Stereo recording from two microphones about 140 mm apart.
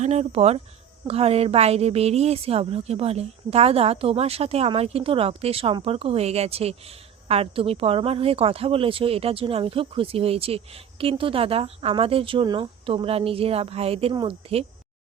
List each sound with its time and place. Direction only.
0.0 s speech: 50° right (ahead or behind)
14.1 s speech: 30° right (ahead or behind)